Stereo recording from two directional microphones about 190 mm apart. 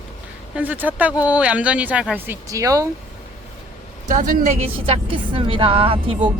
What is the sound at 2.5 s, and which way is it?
Speech, 15° right (ahead or behind).